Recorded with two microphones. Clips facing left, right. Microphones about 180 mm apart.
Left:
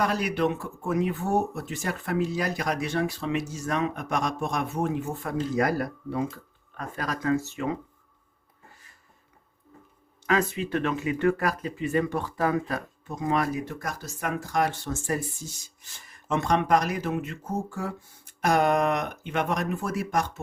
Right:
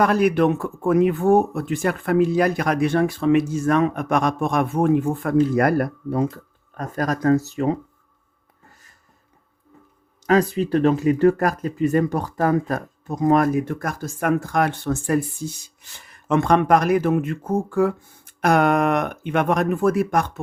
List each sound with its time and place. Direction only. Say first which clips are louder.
0.0 s speech: right 8 dB; 55° right (ahead or behind)
6.1 s speech: right 7 dB; 45° right (ahead or behind)
10.2 s speech: right 7 dB; 35° right (ahead or behind); by 20.4 s 55° right (ahead or behind)